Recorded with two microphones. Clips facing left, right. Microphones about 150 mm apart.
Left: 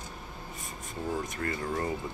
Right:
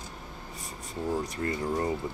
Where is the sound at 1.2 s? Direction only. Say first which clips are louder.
Right 3 dB; 25° right (ahead or behind).